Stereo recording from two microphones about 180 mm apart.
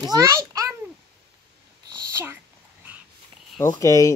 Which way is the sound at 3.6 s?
15° left (ahead or behind).